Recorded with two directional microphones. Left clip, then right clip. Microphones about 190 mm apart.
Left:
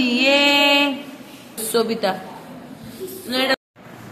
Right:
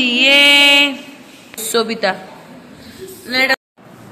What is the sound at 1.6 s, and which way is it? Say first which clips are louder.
Speech: right 3 dB; 10° right (ahead or behind).